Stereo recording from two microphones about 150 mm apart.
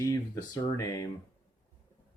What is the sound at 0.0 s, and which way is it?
Speech, 20° left (ahead or behind).